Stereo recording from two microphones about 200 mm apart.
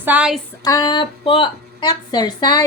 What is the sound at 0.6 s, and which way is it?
A woman's voice, 20° left (ahead or behind).